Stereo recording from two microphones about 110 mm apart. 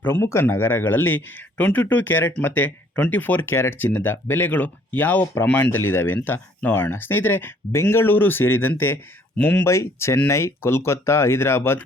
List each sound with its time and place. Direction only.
0.0 s speech: 25° left (ahead or behind)